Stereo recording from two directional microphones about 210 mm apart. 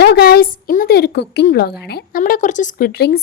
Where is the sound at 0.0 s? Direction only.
50° left (ahead or behind).